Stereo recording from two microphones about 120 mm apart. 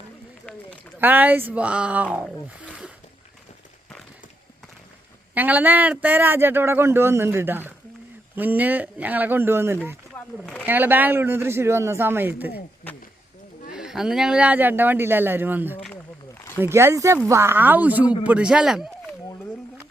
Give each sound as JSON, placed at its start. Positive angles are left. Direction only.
{"t": 0.9, "sound": "speech", "side_deg": -15}
{"t": 5.3, "sound": "speech", "side_deg": -15}
{"t": 10.4, "sound": "speech", "side_deg": 10}
{"t": 10.7, "sound": "speech", "side_deg": -15}
{"t": 13.7, "sound": "speech", "side_deg": -5}